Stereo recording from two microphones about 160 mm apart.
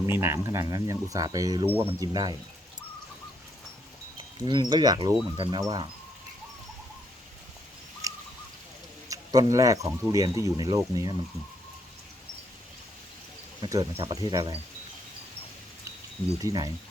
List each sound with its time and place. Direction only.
0.0 s speech: 15° right (ahead or behind)
4.4 s speech: 30° right (ahead or behind)
8.0 s bird: 20° right (ahead or behind)
9.0 s speech: 20° right (ahead or behind)
13.6 s speech: 20° right (ahead or behind)
16.4 s speech: 25° right (ahead or behind)